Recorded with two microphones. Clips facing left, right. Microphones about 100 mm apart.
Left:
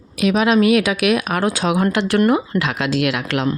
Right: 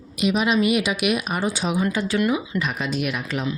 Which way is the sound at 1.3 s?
90° left.